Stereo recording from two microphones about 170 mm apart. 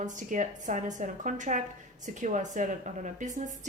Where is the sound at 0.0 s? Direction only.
45° right (ahead or behind).